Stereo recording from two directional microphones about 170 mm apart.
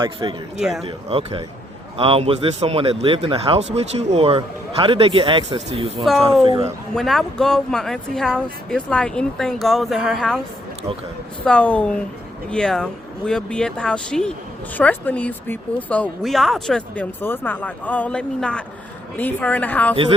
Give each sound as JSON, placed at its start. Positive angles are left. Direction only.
{"t": 0.0, "sound": "a man's voice", "side_deg": -30}
{"t": 6.9, "sound": "speech", "side_deg": 0}
{"t": 11.4, "sound": "speech", "side_deg": 5}